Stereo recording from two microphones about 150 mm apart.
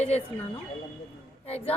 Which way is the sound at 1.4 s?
40° left (ahead or behind).